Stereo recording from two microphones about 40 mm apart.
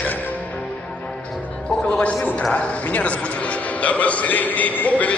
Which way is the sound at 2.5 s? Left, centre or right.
Left.